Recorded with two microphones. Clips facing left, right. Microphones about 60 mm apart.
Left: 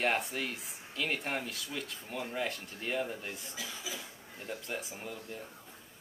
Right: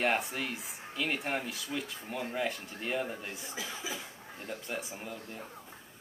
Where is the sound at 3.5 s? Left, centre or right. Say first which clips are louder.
Right 3 dB; right.